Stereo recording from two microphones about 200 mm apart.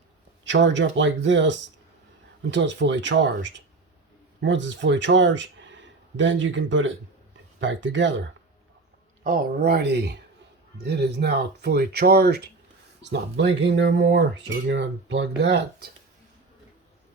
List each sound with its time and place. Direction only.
0.4 s speech: 65° right (ahead or behind)
9.2 s speech: 50° right (ahead or behind)